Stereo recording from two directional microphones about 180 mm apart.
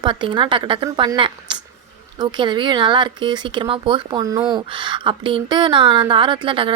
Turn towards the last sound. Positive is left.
turn(degrees=-30)  # may be behind; listen again after turning